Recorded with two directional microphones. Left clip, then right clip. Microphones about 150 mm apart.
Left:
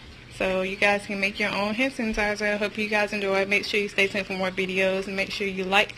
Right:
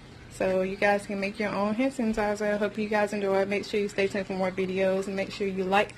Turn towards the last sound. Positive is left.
turn(degrees=-15)  # may be behind; listen again after turning